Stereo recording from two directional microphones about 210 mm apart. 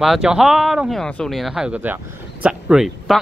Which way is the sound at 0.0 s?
5° right (ahead or behind).